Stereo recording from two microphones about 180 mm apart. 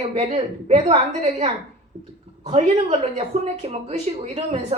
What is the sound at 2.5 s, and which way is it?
Speech, 35° right (ahead or behind).